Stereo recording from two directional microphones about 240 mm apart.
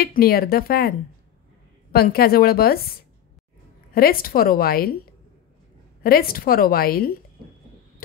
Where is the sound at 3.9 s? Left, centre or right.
Left.